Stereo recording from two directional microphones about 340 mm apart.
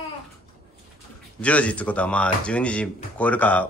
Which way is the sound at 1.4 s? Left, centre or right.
Centre.